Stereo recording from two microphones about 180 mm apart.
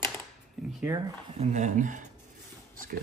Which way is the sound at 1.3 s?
40° right (ahead or behind).